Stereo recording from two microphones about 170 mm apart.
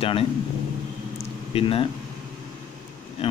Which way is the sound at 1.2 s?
35° left (ahead or behind).